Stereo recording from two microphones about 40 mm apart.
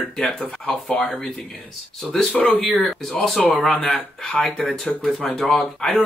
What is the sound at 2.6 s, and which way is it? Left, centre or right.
Speech, centre.